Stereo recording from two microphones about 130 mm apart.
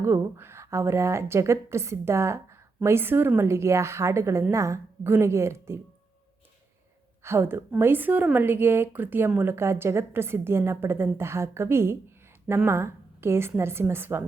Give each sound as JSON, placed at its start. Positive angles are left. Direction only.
{"t": 0.0, "sound": "a woman's voice", "side_deg": -20}
{"t": 7.3, "sound": "a woman's voice", "side_deg": -20}